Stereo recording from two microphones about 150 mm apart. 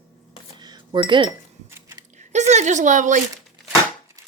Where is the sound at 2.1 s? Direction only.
50° right (ahead or behind).